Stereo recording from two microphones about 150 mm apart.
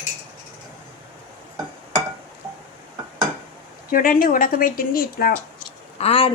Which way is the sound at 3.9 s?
70° left (ahead or behind).